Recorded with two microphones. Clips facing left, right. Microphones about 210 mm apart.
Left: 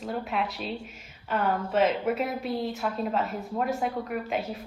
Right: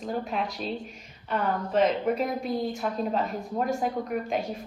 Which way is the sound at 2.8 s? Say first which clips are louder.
Right 1 dB; 40° right (ahead or behind).